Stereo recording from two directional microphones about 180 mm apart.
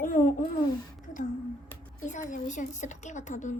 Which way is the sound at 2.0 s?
45° left (ahead or behind).